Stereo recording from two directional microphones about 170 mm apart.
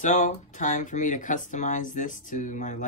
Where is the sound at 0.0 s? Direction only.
45° left (ahead or behind).